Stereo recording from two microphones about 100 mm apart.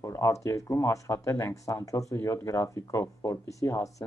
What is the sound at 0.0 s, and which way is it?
Speech, 35° left (ahead or behind).